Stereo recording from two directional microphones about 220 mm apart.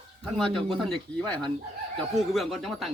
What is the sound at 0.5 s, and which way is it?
Speech, centre (ahead or behind).